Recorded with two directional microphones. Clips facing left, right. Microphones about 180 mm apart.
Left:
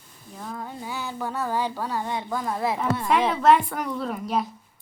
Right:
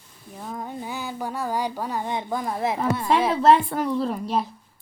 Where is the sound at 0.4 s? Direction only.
20° right (ahead or behind).